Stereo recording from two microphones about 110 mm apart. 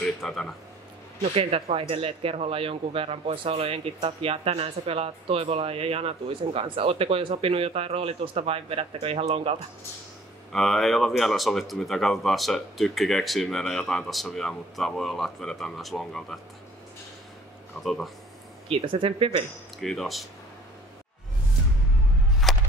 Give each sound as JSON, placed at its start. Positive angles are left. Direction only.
{"t": 0.0, "sound": "speech", "side_deg": 5}
{"t": 1.3, "sound": "speech", "side_deg": -65}
{"t": 10.5, "sound": "speech", "side_deg": 0}
{"t": 17.8, "sound": "speech", "side_deg": 0}
{"t": 18.7, "sound": "speech", "side_deg": -55}
{"t": 19.8, "sound": "speech", "side_deg": 0}
{"t": 22.4, "sound": "a sound", "side_deg": 0}